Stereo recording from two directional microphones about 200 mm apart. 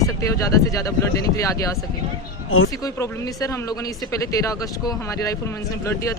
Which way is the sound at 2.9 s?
15° left (ahead or behind).